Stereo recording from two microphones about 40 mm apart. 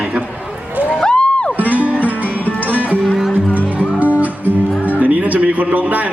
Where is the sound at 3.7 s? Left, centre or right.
Right.